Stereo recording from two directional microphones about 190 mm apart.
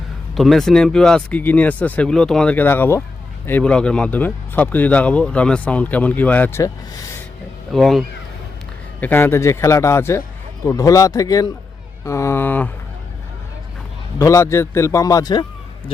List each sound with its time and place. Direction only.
0.3 s speech: centre (ahead or behind)
7.7 s a man's voice: centre (ahead or behind)
14.2 s speech: 15° left (ahead or behind)